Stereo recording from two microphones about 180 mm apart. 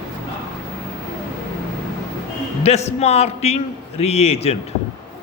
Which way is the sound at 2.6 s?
35° left (ahead or behind).